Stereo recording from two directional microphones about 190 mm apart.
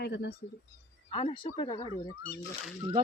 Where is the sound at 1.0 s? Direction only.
30° left (ahead or behind).